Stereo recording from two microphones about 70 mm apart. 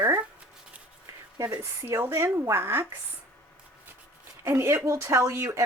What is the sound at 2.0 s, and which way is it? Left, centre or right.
Speech, right.